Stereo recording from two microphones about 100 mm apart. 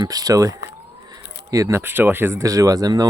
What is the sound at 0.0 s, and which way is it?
Speech, 40° right (ahead or behind).